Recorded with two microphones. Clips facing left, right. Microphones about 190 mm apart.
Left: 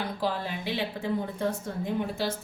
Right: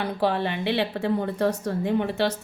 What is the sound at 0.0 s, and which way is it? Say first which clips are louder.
Speech: right 6 dB; 65° right (ahead or behind).